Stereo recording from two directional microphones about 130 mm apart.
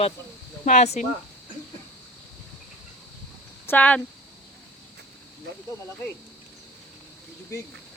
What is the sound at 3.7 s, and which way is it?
Speech, 10° left (ahead or behind).